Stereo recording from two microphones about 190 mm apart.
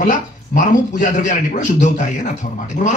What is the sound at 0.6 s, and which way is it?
Speech, 40° left (ahead or behind).